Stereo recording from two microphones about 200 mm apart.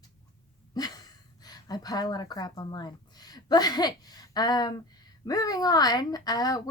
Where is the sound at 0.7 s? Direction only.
20° left (ahead or behind).